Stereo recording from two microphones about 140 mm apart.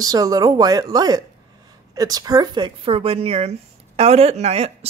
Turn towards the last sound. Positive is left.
turn(degrees=-50)  # may be behind; listen again after turning